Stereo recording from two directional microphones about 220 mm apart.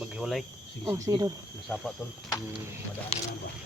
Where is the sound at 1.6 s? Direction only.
Centre (ahead or behind).